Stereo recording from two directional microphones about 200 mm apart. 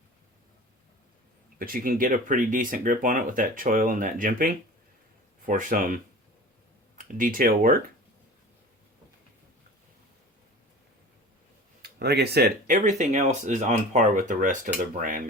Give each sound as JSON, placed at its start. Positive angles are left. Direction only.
{"t": 1.5, "sound": "speech", "side_deg": -45}
{"t": 11.8, "sound": "speech", "side_deg": -55}